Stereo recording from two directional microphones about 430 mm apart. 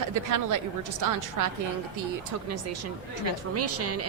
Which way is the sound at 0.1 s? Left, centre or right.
Right.